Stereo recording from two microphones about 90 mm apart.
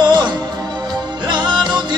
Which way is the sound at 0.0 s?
55° right (ahead or behind).